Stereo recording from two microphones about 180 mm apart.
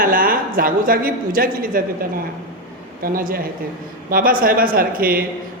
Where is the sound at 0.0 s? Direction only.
50° right (ahead or behind).